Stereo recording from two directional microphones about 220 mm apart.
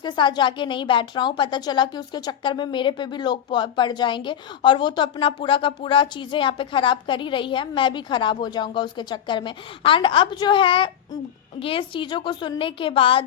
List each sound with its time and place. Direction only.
0.0 s a woman's voice: 20° left (ahead or behind)